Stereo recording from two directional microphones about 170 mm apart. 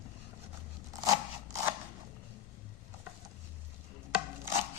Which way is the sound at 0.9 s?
20° right (ahead or behind).